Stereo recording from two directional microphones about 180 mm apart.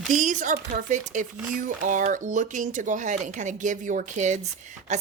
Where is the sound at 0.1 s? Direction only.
45° right (ahead or behind).